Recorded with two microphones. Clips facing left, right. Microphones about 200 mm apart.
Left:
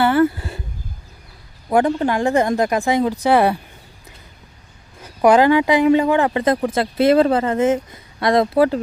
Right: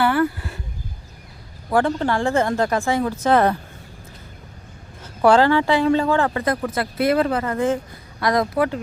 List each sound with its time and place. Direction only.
0.0 s a sound: 25° left (ahead or behind)
1.7 s speech: 15° left (ahead or behind)
5.0 s speech: 15° left (ahead or behind); by 8.8 s 30° left (ahead or behind)